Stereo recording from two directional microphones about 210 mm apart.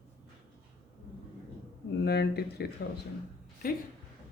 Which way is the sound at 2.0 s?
50° left (ahead or behind).